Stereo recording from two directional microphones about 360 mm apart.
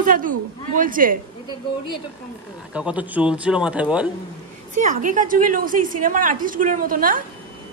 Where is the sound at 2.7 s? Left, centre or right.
Centre.